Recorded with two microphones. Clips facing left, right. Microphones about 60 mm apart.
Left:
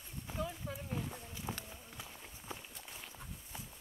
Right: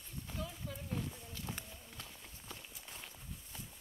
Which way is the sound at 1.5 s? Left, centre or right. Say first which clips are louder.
Left 3 dB; centre.